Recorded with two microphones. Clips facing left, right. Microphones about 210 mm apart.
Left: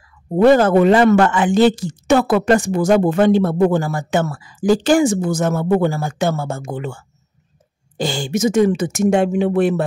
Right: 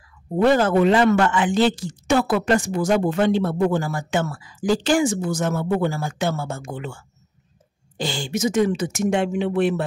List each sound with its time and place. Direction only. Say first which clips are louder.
0.4 s speech: left 5 dB; 50° left (ahead or behind)
8.0 s speech: left 5 dB; 45° left (ahead or behind)